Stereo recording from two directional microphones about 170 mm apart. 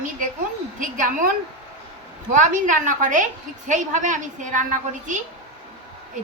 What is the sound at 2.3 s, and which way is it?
A woman's voice, 50° right (ahead or behind).